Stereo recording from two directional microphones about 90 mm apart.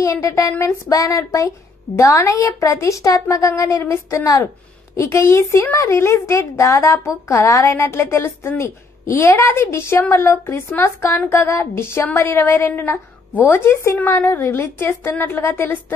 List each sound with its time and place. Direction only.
0.0 s a woman's voice: 35° left (ahead or behind)